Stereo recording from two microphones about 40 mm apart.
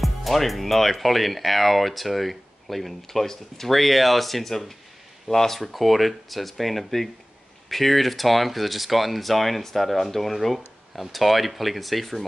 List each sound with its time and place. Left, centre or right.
0.0 s speech: centre